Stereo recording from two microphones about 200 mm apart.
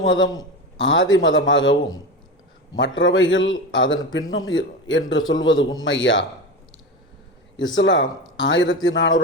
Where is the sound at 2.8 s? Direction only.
70° left (ahead or behind).